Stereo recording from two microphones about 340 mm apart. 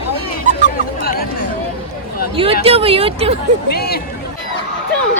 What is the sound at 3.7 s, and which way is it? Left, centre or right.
Speech, left.